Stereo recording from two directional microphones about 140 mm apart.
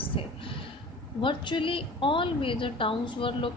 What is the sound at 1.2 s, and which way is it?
A woman's voice, 35° left (ahead or behind).